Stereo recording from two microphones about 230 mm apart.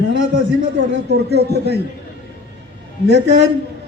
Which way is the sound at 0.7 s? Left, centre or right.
Right.